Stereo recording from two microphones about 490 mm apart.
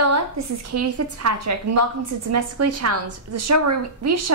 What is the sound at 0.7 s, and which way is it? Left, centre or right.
A woman's voice, right.